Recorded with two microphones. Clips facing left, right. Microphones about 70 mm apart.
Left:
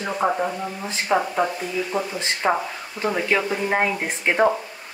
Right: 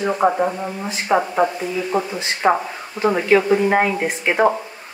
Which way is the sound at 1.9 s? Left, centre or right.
Right.